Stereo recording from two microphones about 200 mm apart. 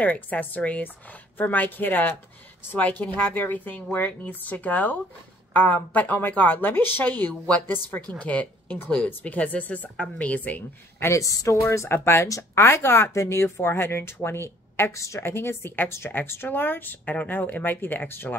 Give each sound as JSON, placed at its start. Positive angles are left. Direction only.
{"t": 0.0, "sound": "speech", "side_deg": 10}